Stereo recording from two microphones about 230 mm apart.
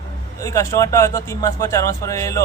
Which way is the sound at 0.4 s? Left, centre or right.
Centre.